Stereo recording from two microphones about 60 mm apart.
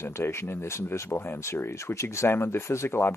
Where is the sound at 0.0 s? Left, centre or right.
Left.